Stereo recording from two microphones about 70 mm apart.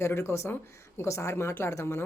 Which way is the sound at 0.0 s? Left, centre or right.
Left.